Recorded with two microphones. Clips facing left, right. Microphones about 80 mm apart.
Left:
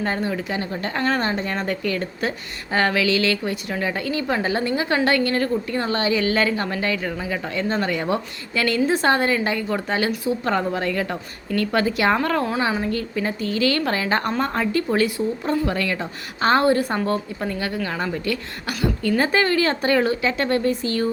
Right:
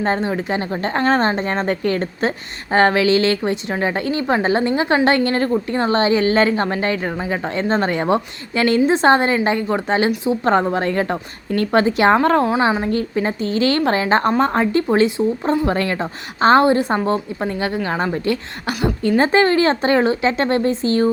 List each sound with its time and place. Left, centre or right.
0.0 s a woman's voice: right
12.8 s a woman's voice: right